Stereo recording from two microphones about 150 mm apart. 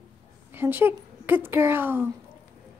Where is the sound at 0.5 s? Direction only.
15° right (ahead or behind).